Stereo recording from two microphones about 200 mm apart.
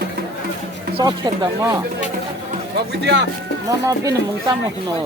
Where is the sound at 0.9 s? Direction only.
20° right (ahead or behind).